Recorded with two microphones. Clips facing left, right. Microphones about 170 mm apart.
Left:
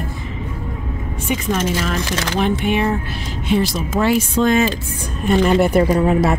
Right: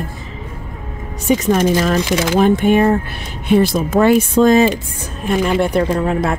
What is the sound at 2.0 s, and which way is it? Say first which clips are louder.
Speech: right 6 dB; 15° right (ahead or behind).